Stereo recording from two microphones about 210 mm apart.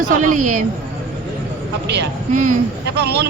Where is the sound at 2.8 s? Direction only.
50° right (ahead or behind).